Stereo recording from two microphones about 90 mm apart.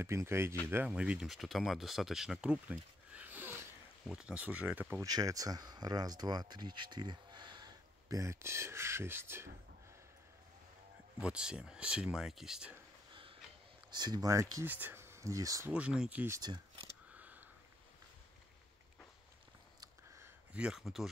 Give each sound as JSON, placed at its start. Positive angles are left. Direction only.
{"t": 0.0, "sound": "speech", "side_deg": -30}
{"t": 0.8, "sound": "speech", "side_deg": -10}
{"t": 1.2, "sound": "speech", "side_deg": 0}
{"t": 5.0, "sound": "speech", "side_deg": -45}
{"t": 11.1, "sound": "speech", "side_deg": -10}
{"t": 13.1, "sound": "a sound", "side_deg": -75}
{"t": 13.8, "sound": "speech", "side_deg": -50}
{"t": 14.7, "sound": "speech", "side_deg": -20}
{"t": 15.7, "sound": "speech", "side_deg": -10}
{"t": 16.3, "sound": "speech", "side_deg": -50}
{"t": 17.1, "sound": "a sound", "side_deg": -15}
{"t": 20.5, "sound": "speech", "side_deg": -10}